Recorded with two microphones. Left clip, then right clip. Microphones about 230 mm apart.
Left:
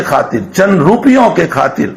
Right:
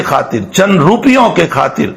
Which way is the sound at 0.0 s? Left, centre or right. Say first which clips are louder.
Left 1 dB; right.